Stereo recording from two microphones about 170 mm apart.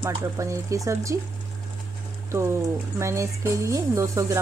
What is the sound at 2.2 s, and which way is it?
Speech, 15° right (ahead or behind).